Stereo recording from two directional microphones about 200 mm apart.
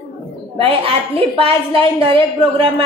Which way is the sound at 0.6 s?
30° right (ahead or behind).